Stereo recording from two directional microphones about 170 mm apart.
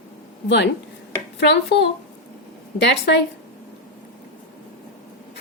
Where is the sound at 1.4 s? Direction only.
90° left.